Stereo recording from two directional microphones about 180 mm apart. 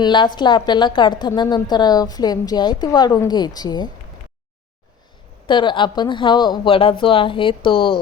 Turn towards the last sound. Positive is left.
turn(degrees=25)  # may be behind; listen again after turning